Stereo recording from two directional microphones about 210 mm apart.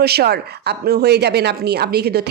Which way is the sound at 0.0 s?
50° right (ahead or behind).